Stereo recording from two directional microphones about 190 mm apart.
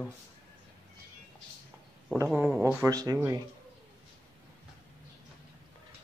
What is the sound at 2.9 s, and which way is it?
Speech, 20° right (ahead or behind).